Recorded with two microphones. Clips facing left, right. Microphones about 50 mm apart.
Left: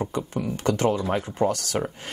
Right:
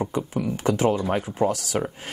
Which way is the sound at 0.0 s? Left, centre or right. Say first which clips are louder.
Right 2 dB; centre.